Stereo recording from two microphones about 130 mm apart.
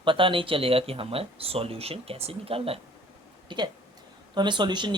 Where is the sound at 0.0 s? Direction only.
40° right (ahead or behind).